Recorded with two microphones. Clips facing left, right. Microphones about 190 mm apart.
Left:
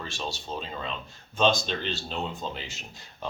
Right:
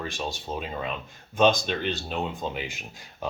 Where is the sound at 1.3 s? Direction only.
15° right (ahead or behind).